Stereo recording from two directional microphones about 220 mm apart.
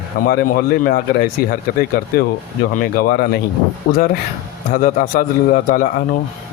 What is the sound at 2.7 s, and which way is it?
Speech, 40° left (ahead or behind).